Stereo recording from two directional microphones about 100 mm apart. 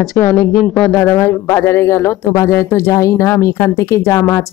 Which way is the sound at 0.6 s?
10° left (ahead or behind).